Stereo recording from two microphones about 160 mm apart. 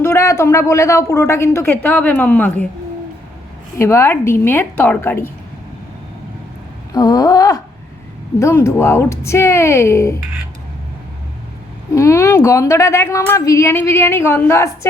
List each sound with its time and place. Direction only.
0.0 s a woman's voice: 15° left (ahead or behind)
3.8 s a woman's voice: 15° left (ahead or behind)
6.9 s a sound: 20° left (ahead or behind)
8.4 s a woman's voice: 15° left (ahead or behind)
11.9 s a woman's voice: 20° left (ahead or behind)